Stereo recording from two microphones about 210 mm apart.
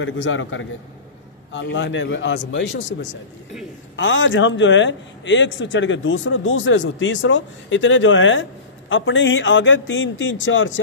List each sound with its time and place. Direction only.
0.0 s a man's voice: 65° left (ahead or behind)